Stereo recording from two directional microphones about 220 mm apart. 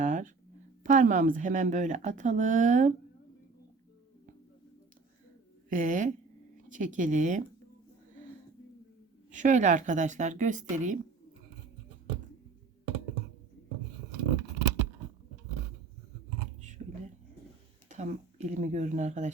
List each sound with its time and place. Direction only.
0.0 s a sound: 35° right (ahead or behind)
0.9 s speech: 40° right (ahead or behind)
5.6 s a woman's voice: 35° right (ahead or behind)
9.3 s speech: 35° right (ahead or behind)
16.6 s a sound: 35° right (ahead or behind)
17.8 s speech: 30° right (ahead or behind)